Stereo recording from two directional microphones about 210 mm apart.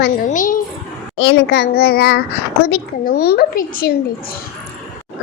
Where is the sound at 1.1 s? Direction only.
60° left (ahead or behind).